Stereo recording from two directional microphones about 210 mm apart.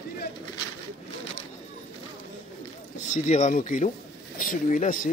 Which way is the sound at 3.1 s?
35° left (ahead or behind).